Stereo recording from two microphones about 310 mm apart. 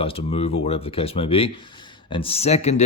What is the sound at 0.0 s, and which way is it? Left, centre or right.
Speech, centre.